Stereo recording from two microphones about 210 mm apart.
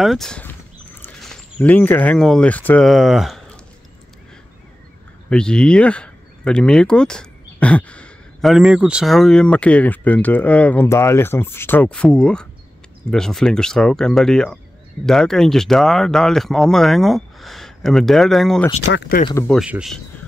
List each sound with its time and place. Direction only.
0.0 s speech: centre (ahead or behind)
5.3 s speech: 5° left (ahead or behind)
18.9 s speech: 55° left (ahead or behind)
19.4 s speech: centre (ahead or behind)